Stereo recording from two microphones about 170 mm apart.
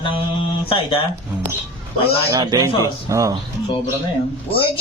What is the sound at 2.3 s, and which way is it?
Speech, 25° right (ahead or behind).